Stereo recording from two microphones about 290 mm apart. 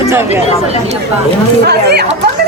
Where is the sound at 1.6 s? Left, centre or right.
Right.